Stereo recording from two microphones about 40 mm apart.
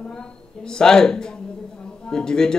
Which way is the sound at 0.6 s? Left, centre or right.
Centre.